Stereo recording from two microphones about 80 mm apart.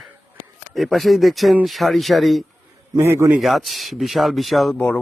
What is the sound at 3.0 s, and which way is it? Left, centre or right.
Speech, right.